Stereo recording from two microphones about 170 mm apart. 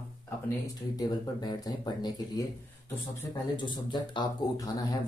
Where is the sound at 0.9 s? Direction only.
25° left (ahead or behind).